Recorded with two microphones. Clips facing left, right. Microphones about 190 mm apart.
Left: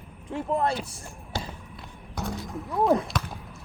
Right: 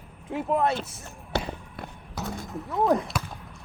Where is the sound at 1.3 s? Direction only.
65° right (ahead or behind).